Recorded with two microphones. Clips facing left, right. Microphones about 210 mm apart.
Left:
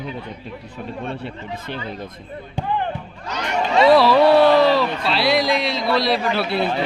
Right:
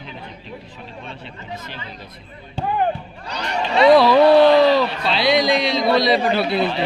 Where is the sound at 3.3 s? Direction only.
35° right (ahead or behind).